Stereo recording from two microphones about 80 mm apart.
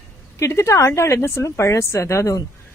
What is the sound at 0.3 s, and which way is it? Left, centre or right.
A woman's voice, left.